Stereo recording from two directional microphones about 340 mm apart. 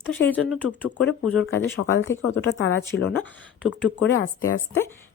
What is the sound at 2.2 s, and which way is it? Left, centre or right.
Speech, left.